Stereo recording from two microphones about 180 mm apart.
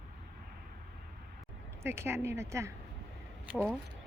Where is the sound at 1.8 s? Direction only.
15° right (ahead or behind).